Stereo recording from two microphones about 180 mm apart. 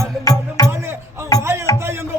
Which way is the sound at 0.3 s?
20° left (ahead or behind).